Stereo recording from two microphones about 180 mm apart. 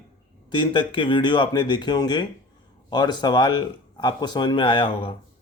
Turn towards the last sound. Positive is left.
turn(degrees=25)  # may be behind; listen again after turning